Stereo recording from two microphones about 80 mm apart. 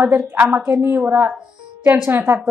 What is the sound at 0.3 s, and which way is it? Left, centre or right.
A woman's voice, right.